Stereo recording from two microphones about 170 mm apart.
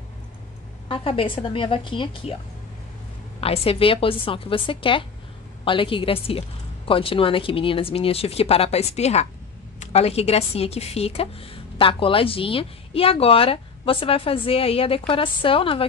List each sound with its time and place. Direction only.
0.8 s a woman's voice: 30° left (ahead or behind)
3.3 s a woman's voice: 35° left (ahead or behind)